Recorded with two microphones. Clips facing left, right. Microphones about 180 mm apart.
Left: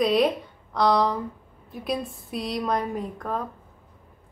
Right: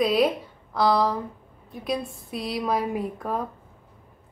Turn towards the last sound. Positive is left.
turn(degrees=-10)  # may be behind; listen again after turning